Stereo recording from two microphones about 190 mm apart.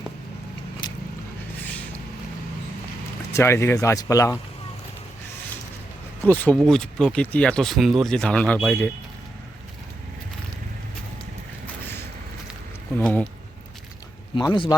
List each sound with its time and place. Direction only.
3.3 s speech: 15° left (ahead or behind)
6.2 s speech: 10° left (ahead or behind)
13.0 s speech: 10° left (ahead or behind)
14.3 s speech: 25° left (ahead or behind)